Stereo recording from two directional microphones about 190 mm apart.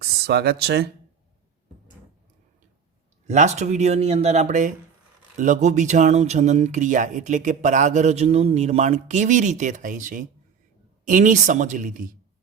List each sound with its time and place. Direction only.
0.0 s speech: 60° right (ahead or behind)
3.2 s speech: 35° right (ahead or behind)